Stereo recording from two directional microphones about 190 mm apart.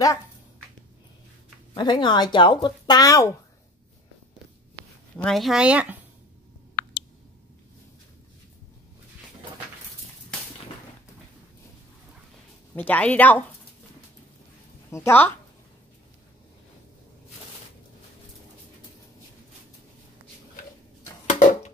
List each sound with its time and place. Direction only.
1.7 s speech: 25° left (ahead or behind)
5.1 s speech: centre (ahead or behind)
12.7 s a woman's voice: 10° left (ahead or behind)
14.9 s a woman's voice: 10° left (ahead or behind)
21.3 s a sound: 40° left (ahead or behind)